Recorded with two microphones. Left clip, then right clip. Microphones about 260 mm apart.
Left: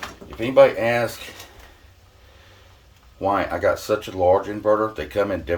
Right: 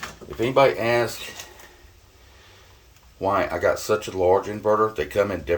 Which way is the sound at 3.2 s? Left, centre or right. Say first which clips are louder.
Left 1 dB; centre.